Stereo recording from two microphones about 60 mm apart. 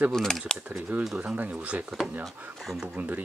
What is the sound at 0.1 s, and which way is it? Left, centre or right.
Speech, centre.